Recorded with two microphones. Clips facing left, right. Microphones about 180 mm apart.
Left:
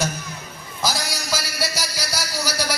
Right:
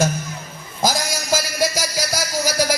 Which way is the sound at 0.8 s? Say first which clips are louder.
Right 5 dB; 50° right (ahead or behind).